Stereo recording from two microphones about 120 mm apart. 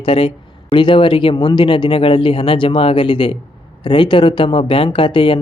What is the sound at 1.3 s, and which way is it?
Speech, 35° left (ahead or behind).